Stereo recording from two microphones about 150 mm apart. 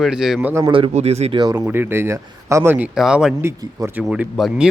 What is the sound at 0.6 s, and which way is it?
Speech, 35° right (ahead or behind).